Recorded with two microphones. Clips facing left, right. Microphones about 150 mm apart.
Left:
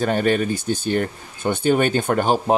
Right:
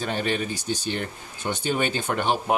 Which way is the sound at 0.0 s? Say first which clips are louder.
Left 7 dB; 50° left (ahead or behind).